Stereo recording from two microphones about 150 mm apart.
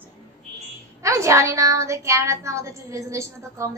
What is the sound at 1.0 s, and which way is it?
A woman's voice, 20° right (ahead or behind).